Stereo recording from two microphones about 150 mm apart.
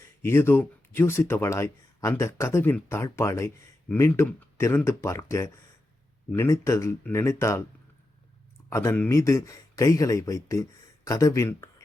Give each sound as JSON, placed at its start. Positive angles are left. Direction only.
{"t": 0.2, "sound": "speech", "side_deg": 15}
{"t": 8.7, "sound": "speech", "side_deg": 20}